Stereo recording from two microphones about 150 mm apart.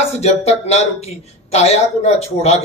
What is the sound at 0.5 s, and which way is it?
Speech, 45° left (ahead or behind).